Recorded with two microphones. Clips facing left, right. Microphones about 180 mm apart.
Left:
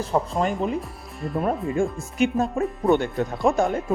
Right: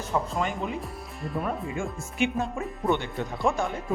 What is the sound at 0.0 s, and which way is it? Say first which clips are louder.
Speech: left 5 dB; 35° left (ahead or behind).